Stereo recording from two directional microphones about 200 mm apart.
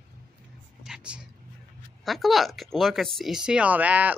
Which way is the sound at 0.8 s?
5° right (ahead or behind).